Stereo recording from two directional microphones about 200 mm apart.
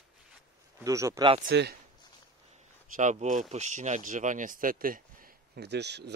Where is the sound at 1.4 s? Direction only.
60° right (ahead or behind).